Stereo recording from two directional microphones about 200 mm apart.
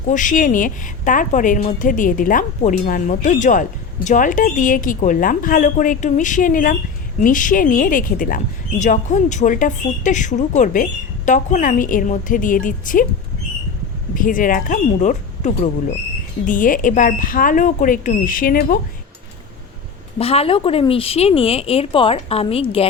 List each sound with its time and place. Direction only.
0.1 s a woman's voice: 40° left (ahead or behind)
14.2 s a woman's voice: 40° left (ahead or behind)
20.1 s speech: 30° left (ahead or behind)